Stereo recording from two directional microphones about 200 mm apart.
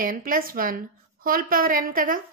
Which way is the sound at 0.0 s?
45° right (ahead or behind).